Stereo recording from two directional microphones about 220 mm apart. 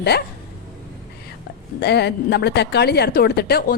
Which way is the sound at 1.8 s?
50° left (ahead or behind).